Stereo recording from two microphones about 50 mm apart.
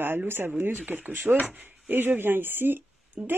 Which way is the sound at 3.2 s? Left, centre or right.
Right.